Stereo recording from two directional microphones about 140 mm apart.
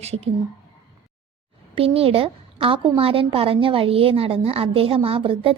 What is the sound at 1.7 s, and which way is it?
A woman's voice, 40° right (ahead or behind).